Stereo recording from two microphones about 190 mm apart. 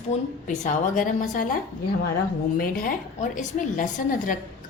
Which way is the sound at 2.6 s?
45° left (ahead or behind).